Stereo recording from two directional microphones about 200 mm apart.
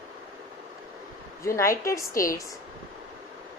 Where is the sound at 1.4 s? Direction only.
15° left (ahead or behind).